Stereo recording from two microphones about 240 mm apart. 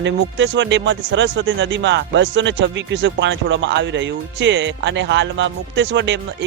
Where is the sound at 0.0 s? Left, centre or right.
Right.